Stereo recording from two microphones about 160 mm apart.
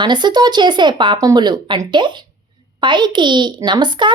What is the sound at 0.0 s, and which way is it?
A child's voice, 30° right (ahead or behind).